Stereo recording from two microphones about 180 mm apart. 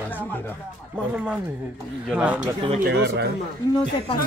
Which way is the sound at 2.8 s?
70° right (ahead or behind).